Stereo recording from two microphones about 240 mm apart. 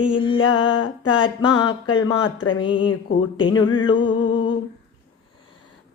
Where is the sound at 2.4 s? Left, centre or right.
Centre.